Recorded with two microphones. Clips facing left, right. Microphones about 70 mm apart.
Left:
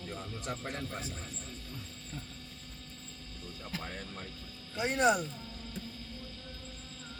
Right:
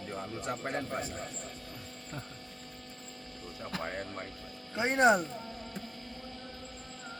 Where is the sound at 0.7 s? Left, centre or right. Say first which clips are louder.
Right 5 dB; right.